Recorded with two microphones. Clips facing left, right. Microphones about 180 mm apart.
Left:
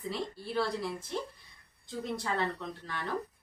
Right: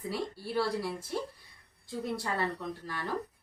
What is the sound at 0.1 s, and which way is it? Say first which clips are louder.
Speech: right 1 dB; 10° right (ahead or behind).